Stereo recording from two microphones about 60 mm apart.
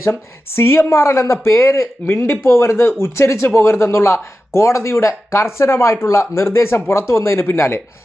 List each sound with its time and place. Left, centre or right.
0.0 s speech: left